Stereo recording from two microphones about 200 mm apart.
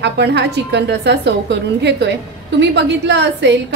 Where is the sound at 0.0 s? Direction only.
60° right (ahead or behind).